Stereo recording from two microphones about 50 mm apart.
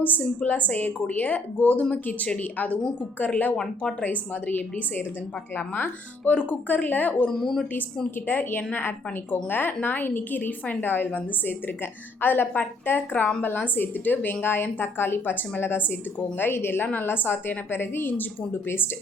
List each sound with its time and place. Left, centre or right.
0.0 s a woman's voice: left
7.3 s speech: centre
8.3 s a woman's voice: left